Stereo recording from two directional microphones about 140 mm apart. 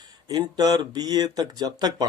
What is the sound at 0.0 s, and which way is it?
Speech, 30° right (ahead or behind).